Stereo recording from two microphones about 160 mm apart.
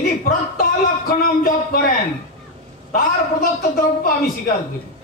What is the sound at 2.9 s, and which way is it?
Speech, 65° left (ahead or behind).